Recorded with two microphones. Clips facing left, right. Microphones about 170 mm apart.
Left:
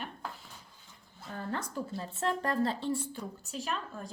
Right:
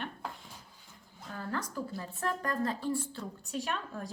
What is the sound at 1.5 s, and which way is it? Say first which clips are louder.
A woman's voice: even; 25° left (ahead or behind).